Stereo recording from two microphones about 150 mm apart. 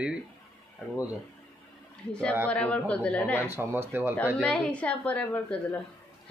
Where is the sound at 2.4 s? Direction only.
10° left (ahead or behind).